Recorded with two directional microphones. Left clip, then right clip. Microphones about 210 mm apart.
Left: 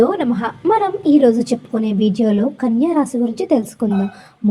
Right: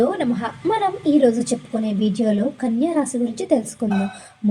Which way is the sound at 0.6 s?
15° left (ahead or behind).